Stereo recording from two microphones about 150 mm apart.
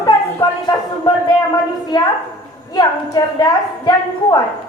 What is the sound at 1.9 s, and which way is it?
A woman's voice, 30° left (ahead or behind).